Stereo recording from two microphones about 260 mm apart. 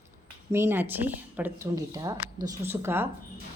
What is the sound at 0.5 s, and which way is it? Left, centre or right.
A woman's voice, centre.